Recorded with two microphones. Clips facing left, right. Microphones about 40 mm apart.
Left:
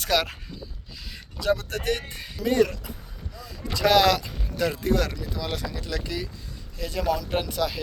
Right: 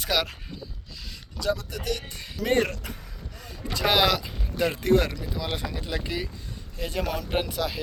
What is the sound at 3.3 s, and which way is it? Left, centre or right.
Vehicle, right.